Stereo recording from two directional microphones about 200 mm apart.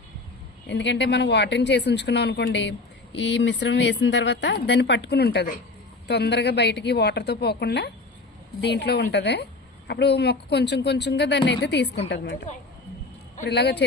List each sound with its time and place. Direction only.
0.7 s a woman's voice: 60° left (ahead or behind)
13.5 s a woman's voice: 60° left (ahead or behind)